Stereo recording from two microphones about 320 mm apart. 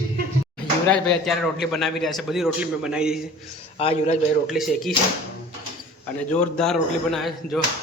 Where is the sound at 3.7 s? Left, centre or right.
Centre.